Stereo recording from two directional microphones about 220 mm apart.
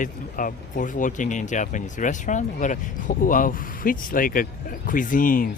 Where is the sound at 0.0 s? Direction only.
35° left (ahead or behind).